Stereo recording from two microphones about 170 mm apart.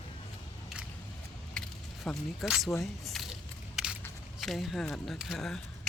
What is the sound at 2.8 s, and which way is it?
Speech, centre (ahead or behind).